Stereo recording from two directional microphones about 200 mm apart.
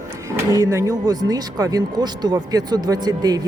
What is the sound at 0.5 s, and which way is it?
Speech, 15° right (ahead or behind).